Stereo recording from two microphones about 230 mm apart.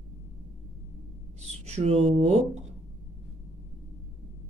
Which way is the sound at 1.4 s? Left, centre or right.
Right.